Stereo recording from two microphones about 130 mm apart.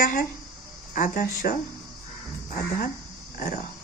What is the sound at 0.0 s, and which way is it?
Speech, 90° left.